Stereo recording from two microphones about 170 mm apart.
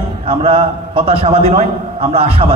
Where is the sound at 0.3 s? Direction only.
35° right (ahead or behind).